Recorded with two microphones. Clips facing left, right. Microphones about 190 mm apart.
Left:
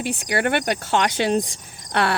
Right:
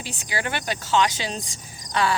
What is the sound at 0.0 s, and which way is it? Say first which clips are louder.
Speech: left 7 dB; 60° left (ahead or behind).